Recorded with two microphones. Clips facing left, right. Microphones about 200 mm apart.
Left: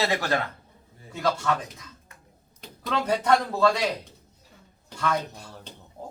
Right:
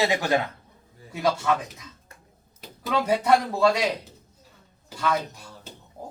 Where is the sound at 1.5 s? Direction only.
15° right (ahead or behind).